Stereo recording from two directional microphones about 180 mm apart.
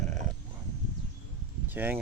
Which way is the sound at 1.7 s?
10° right (ahead or behind).